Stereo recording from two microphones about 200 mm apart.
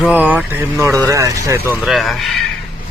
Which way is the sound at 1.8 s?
Centre (ahead or behind).